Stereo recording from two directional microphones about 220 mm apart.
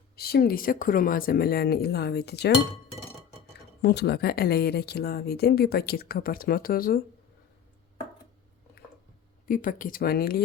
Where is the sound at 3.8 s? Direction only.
50° left (ahead or behind).